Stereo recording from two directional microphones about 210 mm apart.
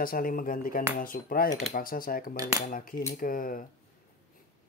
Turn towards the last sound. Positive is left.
turn(degrees=40)  # may be behind; listen again after turning